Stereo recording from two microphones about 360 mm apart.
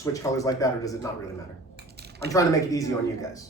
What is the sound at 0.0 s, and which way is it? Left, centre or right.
Speech, centre.